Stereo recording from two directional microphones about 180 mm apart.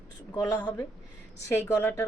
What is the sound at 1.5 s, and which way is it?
Speech, 15° left (ahead or behind).